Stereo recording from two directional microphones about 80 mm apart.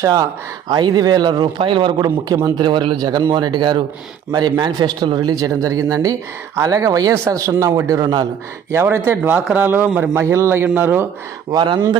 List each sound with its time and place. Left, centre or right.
0.7 s a man's voice: right
2.6 s a man's voice: right
5.3 s speech: right
8.7 s speech: right
10.1 s speech: right
11.5 s speech: right